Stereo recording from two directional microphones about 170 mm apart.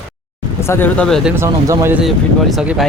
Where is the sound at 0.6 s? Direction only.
15° left (ahead or behind); by 1.4 s 5° right (ahead or behind).